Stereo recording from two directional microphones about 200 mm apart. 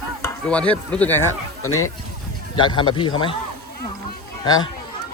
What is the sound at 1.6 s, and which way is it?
Speech, 90° left.